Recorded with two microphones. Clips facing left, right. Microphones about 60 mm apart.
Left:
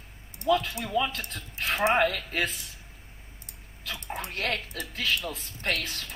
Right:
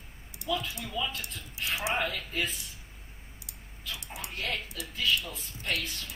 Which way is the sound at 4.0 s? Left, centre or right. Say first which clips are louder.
Left 7 dB; left.